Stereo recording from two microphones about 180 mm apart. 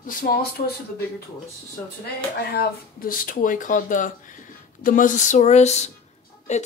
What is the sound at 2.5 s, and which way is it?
Speech, 60° left (ahead or behind).